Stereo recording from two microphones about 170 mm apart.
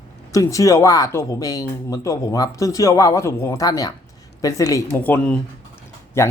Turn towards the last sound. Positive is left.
turn(degrees=15)  # may be behind; listen again after turning